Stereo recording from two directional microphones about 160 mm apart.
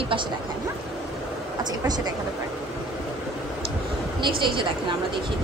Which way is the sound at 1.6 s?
25° right (ahead or behind).